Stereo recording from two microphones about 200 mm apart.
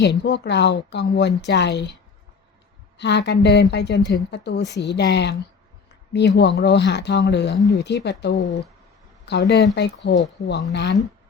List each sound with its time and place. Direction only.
0.0 s speech: 55° left (ahead or behind)
3.0 s speech: 55° left (ahead or behind)